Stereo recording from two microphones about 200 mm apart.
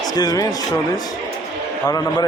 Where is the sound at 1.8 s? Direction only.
20° left (ahead or behind).